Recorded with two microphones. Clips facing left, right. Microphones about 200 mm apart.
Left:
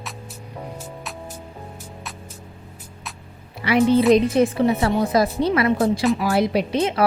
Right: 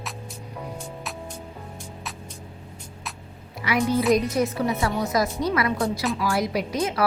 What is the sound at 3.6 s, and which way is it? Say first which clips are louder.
A woman's voice: left 6 dB; 30° left (ahead or behind).